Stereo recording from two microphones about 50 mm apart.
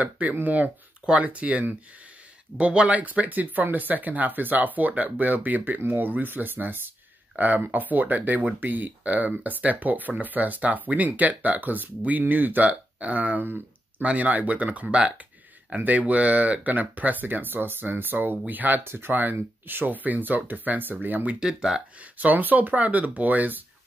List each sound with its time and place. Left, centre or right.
0.4 s speech: right
18.9 s speech: right
19.1 s speech: right
21.3 s speech: centre
22.0 s speech: right